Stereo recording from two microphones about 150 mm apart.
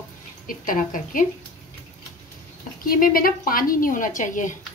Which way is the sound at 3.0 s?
70° left (ahead or behind).